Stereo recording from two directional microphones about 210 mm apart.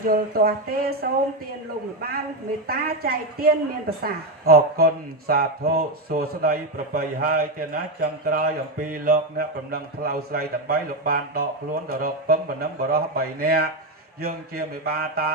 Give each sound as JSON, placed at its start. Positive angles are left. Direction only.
{"t": 0.0, "sound": "speech", "side_deg": -45}
{"t": 2.0, "sound": "speech", "side_deg": -45}